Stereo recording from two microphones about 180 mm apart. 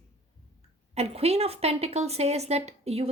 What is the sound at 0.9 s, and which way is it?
Speech, 35° right (ahead or behind).